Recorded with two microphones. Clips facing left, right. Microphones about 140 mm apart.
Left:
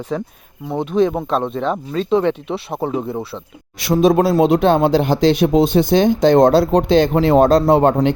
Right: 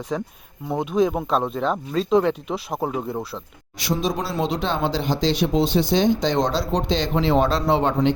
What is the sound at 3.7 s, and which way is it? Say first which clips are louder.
Speech: left 11 dB; 60° left (ahead or behind).